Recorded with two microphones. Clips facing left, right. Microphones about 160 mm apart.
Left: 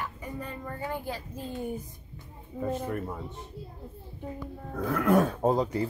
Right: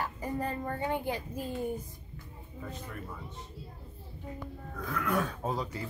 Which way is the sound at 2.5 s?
50° left (ahead or behind).